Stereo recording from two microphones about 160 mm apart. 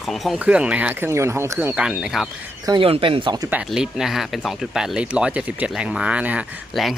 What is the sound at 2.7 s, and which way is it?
Speech, 35° right (ahead or behind).